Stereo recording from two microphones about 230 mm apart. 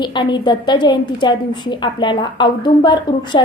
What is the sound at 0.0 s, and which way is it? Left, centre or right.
A woman's voice, centre.